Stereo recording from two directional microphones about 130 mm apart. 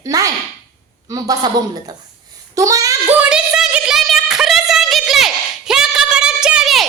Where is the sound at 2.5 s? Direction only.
25° right (ahead or behind).